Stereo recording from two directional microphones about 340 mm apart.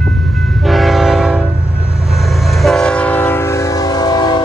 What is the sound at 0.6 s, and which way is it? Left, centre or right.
Train, centre.